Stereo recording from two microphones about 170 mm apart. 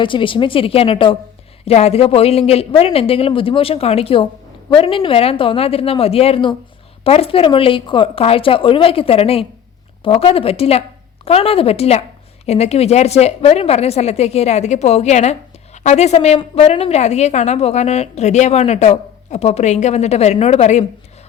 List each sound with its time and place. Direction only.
0.0 s a woman's voice: 30° left (ahead or behind)